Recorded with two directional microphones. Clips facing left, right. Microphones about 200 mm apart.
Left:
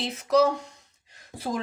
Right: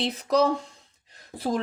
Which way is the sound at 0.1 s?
35° right (ahead or behind).